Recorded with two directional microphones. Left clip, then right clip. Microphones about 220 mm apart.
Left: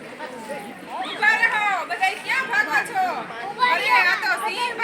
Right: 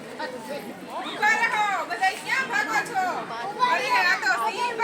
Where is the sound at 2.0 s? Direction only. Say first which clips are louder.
Left 2 dB; 15° left (ahead or behind).